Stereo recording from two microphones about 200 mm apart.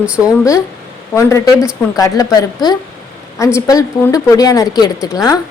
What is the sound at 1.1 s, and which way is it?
A woman's voice, 15° left (ahead or behind).